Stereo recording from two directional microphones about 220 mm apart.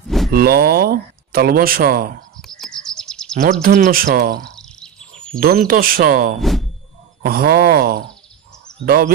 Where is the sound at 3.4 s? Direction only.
40° right (ahead or behind).